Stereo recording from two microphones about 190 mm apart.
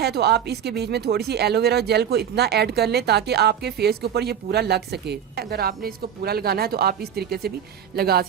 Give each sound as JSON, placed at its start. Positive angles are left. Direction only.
{"t": 0.0, "sound": "speech", "side_deg": -60}